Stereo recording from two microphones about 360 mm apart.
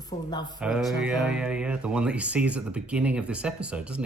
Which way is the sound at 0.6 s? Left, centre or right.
Centre.